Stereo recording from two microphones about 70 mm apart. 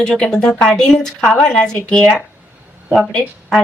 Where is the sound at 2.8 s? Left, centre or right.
Centre.